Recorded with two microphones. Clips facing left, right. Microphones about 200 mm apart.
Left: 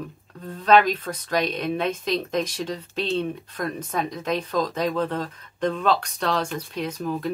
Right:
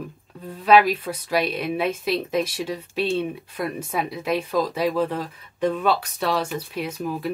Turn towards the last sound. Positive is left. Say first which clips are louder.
# even
turn(degrees=-5)  # may be behind; listen again after turning